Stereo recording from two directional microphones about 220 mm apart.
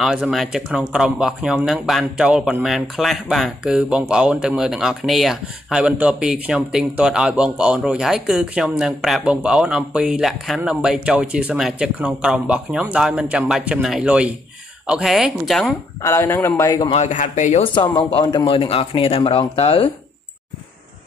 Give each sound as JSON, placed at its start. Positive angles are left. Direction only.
{"t": 0.0, "sound": "speech", "side_deg": 0}
{"t": 16.0, "sound": "a man's voice", "side_deg": 15}
{"t": 16.8, "sound": "speech", "side_deg": 30}
{"t": 18.2, "sound": "speech", "side_deg": 20}